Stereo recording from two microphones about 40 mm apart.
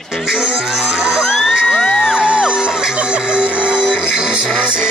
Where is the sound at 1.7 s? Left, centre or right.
Centre.